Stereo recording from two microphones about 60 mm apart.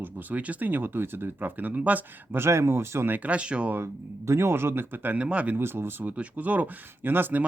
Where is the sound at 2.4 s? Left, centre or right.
Right.